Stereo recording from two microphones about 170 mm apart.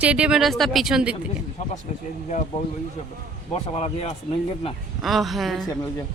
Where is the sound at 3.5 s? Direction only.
35° left (ahead or behind).